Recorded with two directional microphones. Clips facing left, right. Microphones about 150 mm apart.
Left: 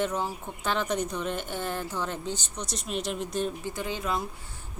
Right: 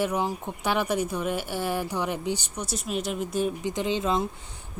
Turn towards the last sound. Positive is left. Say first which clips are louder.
# right 5 dB
turn(degrees=-25)  # may be behind; listen again after turning